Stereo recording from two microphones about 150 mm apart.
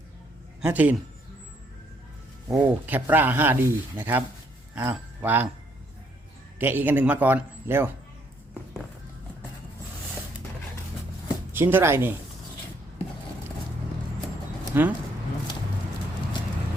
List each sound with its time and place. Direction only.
0.6 s speech: 10° right (ahead or behind)
2.6 s speech: 10° right (ahead or behind)
6.6 s speech: 15° right (ahead or behind)
11.5 s speech: 15° right (ahead or behind)
14.7 s speech: 15° right (ahead or behind)